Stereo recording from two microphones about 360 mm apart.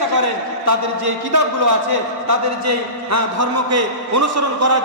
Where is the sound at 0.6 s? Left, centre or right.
Right.